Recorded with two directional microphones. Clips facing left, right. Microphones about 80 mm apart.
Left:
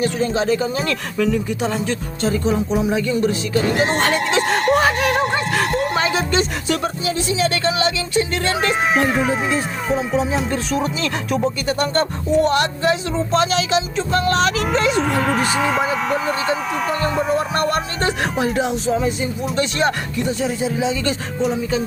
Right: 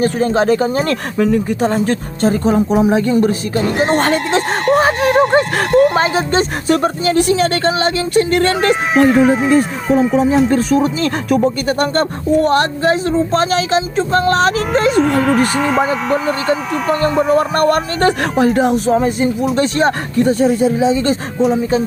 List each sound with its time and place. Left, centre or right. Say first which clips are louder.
0.0 s speech: right 5 dB; right
8.1 s speech: right 7 dB; right
8.7 s speech: right 7 dB; centre
10.5 s speech: right 8 dB; right
14.9 s speech: right 6 dB; centre
17.3 s speech: right 6 dB; right
20.7 s speech: right 7 dB; right